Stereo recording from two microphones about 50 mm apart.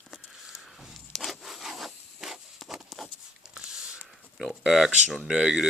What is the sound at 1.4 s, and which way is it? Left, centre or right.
Zipper, centre.